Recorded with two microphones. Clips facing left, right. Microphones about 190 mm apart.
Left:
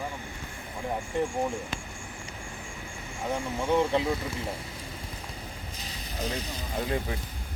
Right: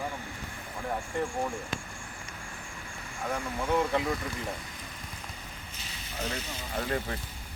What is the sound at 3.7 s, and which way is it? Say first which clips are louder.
Speech: left 3 dB; 25° left (ahead or behind).